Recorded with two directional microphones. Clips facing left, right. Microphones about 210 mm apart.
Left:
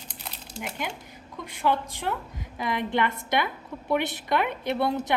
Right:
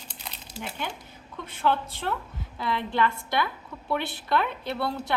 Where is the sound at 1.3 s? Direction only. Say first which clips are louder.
Even; 10° left (ahead or behind).